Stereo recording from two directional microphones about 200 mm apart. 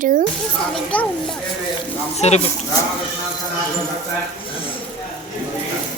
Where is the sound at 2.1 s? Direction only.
35° left (ahead or behind).